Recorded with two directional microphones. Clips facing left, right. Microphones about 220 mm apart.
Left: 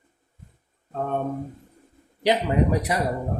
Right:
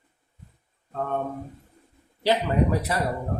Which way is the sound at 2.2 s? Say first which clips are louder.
Left 1 dB; 15° left (ahead or behind).